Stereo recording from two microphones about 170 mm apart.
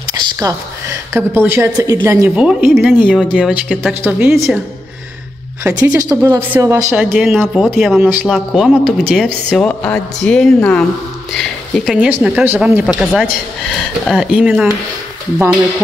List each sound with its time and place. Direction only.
0.1 s a woman's voice: 20° right (ahead or behind)
5.6 s speech: 20° right (ahead or behind)
6.9 s speech: 5° right (ahead or behind)
8.0 s speech: 10° right (ahead or behind)